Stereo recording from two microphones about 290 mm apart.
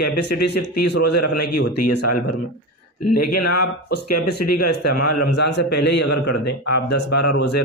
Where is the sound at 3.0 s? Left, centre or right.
Left.